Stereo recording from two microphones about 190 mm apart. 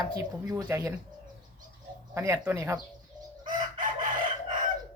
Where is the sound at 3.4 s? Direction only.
45° right (ahead or behind).